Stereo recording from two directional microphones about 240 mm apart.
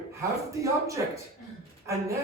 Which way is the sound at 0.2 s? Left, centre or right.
Centre.